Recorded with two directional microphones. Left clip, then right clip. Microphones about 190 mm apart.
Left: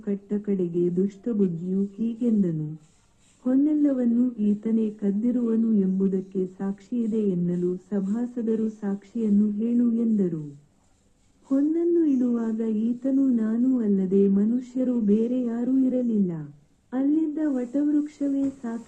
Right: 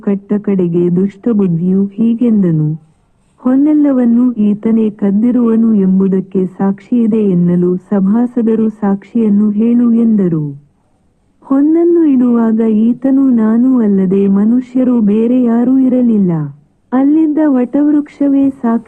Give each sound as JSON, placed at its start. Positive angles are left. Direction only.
{"t": 0.0, "sound": "a woman's voice", "side_deg": -25}
{"t": 11.4, "sound": "a woman's voice", "side_deg": -25}